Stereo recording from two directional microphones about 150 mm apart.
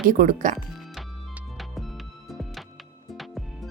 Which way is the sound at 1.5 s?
Centre (ahead or behind).